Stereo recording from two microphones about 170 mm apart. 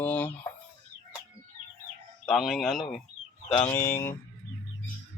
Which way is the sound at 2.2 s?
Centre (ahead or behind).